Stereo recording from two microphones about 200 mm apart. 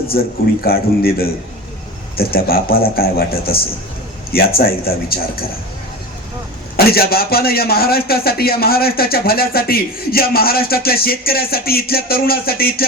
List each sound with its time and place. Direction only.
0.1 s a man's voice: 50° left (ahead or behind)
6.7 s a man's voice: 50° left (ahead or behind)